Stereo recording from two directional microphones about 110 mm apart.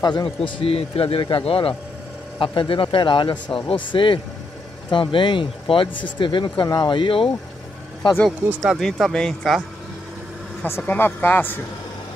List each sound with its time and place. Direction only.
0.0 s a man's voice: 40° left (ahead or behind)
0.4 s speech: 60° left (ahead or behind); by 6.9 s 35° left (ahead or behind)
6.9 s speech: 50° left (ahead or behind)
8.6 s speech: centre (ahead or behind)
10.6 s speech: 15° left (ahead or behind)